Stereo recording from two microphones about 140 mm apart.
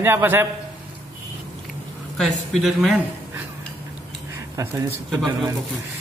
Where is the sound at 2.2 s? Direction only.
Centre (ahead or behind).